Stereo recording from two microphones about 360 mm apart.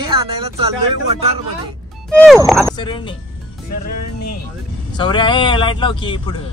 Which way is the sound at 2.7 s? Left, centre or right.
Centre.